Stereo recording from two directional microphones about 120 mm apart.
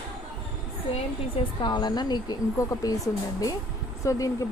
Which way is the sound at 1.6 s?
40° left (ahead or behind).